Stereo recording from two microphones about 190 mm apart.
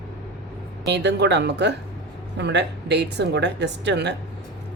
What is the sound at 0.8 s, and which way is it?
A woman's voice, 65° right (ahead or behind).